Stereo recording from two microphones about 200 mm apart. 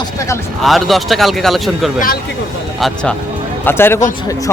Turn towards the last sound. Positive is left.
turn(degrees=10)  # may be behind; listen again after turning